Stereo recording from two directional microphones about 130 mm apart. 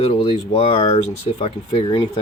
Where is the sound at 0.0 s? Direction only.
45° left (ahead or behind).